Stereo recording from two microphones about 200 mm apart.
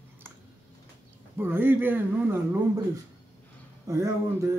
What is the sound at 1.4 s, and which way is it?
Speech, 10° right (ahead or behind).